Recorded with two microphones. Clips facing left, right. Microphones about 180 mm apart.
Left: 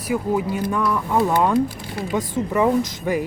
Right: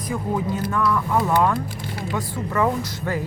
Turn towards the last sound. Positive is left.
turn(degrees=15)  # may be behind; listen again after turning